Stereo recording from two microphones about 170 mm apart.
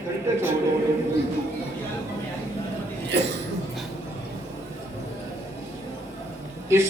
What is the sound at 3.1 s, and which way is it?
Speech, 90° right.